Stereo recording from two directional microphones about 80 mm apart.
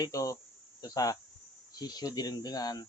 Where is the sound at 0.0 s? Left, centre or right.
Left.